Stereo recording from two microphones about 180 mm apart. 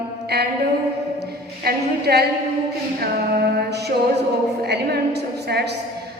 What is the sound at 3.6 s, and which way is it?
A woman's voice, 65° right (ahead or behind).